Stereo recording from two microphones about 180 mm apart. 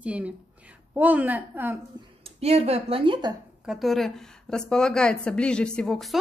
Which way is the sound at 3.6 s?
Centre (ahead or behind).